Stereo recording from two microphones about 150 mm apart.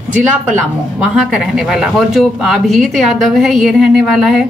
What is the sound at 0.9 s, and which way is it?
Speech, 5° right (ahead or behind).